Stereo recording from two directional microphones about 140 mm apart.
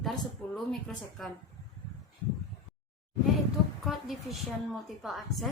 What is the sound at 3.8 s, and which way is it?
A woman's voice, centre (ahead or behind).